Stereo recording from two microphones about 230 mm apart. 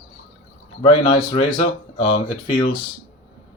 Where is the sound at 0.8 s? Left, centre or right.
Left.